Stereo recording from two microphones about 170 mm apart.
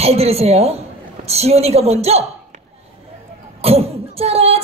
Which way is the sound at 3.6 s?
35° right (ahead or behind).